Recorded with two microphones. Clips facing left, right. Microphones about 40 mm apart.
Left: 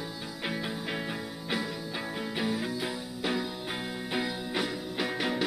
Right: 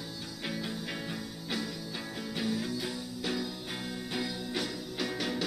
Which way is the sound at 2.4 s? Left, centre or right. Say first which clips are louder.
Left 1 dB; centre.